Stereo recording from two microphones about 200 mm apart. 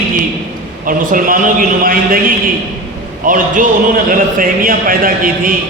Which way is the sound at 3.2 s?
40° right (ahead or behind).